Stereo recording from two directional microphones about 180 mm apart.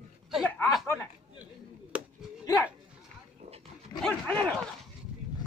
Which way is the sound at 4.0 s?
5° left (ahead or behind).